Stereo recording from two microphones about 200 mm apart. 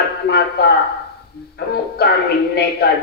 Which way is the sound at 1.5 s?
50° left (ahead or behind).